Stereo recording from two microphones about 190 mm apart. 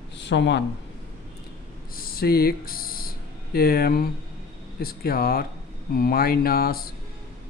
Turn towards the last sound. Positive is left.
turn(degrees=50)  # may be behind; listen again after turning